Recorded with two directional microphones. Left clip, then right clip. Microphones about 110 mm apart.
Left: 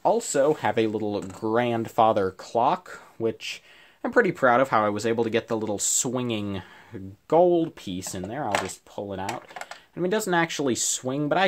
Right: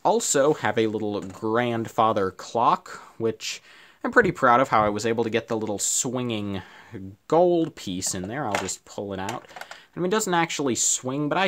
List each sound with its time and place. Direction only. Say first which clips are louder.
0.0 s speech: right 1 dB; 55° right (ahead or behind)
0.6 s speech: even; 25° right (ahead or behind)
7.2 s speech: even; 45° right (ahead or behind)
9.3 s speech: left 1 dB; 25° right (ahead or behind)